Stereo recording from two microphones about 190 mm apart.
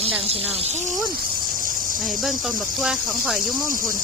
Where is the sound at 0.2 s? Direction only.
30° right (ahead or behind).